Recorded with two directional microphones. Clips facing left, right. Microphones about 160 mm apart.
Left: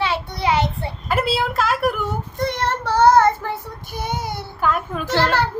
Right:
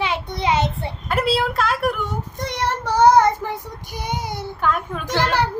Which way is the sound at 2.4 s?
15° right (ahead or behind).